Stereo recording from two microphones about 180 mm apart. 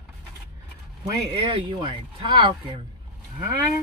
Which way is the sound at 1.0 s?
25° right (ahead or behind).